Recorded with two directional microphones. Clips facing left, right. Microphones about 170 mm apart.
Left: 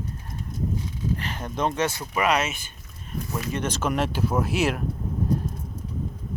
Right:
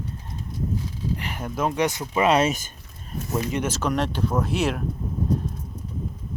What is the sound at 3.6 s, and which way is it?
Speech, centre (ahead or behind).